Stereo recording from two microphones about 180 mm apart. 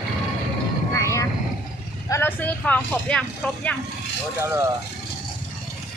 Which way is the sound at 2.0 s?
15° left (ahead or behind).